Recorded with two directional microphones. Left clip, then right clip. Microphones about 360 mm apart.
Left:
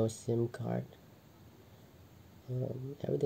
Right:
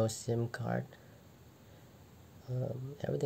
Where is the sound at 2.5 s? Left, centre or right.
Centre.